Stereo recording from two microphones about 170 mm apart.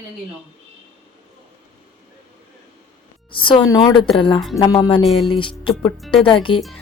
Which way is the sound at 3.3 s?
30° left (ahead or behind).